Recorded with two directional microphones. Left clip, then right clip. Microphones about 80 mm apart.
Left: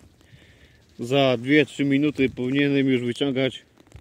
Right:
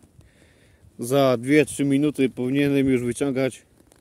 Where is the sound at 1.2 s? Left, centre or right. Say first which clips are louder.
Right 1 dB; right.